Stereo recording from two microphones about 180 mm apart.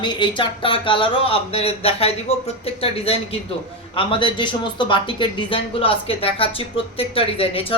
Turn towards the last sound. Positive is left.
turn(degrees=30)  # may be behind; listen again after turning